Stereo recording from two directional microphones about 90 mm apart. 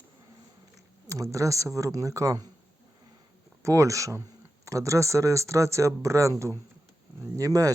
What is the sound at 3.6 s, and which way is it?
Speech, 35° right (ahead or behind).